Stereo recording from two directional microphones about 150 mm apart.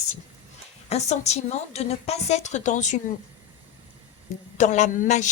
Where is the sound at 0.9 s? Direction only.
45° left (ahead or behind).